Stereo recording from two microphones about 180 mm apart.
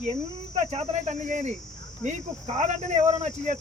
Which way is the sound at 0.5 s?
35° right (ahead or behind).